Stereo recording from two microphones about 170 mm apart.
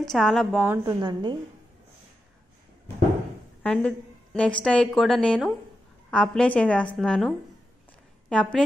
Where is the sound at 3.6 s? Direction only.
5° left (ahead or behind).